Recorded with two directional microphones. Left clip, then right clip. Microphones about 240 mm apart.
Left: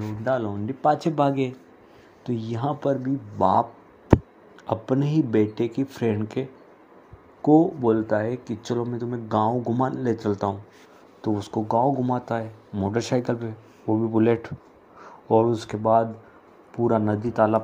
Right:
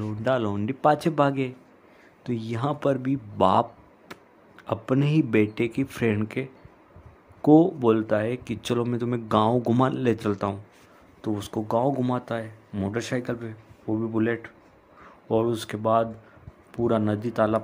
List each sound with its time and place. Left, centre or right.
0.2 s speech: centre
4.6 s speech: centre
9.3 s speech: right
9.7 s speech: centre
14.2 s speech: centre
15.2 s speech: centre